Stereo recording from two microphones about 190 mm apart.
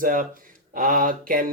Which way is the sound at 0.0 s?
45° right (ahead or behind).